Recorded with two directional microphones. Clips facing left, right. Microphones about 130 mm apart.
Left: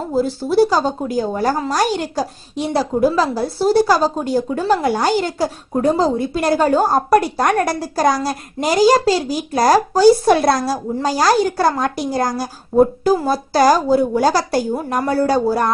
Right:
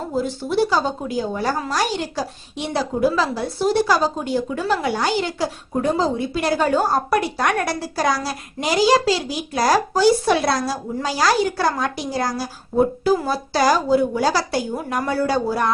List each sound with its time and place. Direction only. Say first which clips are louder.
0.2 s a woman's voice: left 6 dB; 35° left (ahead or behind)